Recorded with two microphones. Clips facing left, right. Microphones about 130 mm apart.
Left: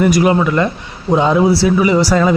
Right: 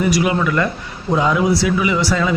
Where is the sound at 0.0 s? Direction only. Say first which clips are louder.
Left 5 dB; 45° left (ahead or behind).